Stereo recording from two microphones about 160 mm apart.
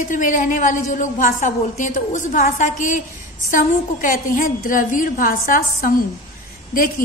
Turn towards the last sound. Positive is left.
turn(degrees=60)  # may be behind; listen again after turning